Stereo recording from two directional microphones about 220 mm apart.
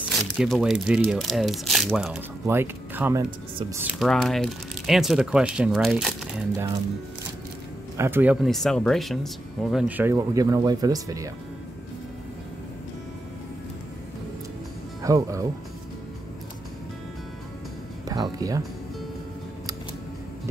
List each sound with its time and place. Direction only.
0.4 s speech: centre (ahead or behind)
8.0 s speech: 10° right (ahead or behind)
15.0 s speech: 15° right (ahead or behind)
18.0 s speech: 15° right (ahead or behind)